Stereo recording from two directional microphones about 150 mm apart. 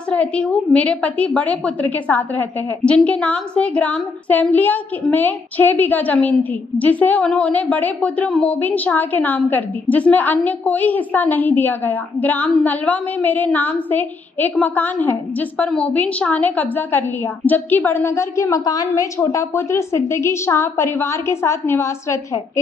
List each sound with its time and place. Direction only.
0.1 s a woman's voice: 10° left (ahead or behind)